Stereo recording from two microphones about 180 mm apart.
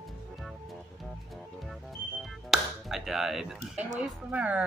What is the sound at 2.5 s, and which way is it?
Speech, centre (ahead or behind).